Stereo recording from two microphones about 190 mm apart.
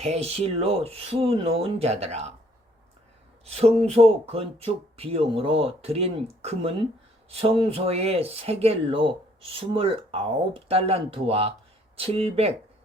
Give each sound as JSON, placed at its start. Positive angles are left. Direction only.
{"t": 0.0, "sound": "speech", "side_deg": -35}
{"t": 3.4, "sound": "speech", "side_deg": -30}